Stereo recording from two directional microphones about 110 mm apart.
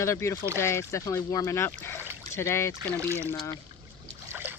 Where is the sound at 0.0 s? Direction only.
25° left (ahead or behind).